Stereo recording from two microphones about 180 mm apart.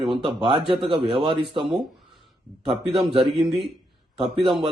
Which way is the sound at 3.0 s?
30° right (ahead or behind).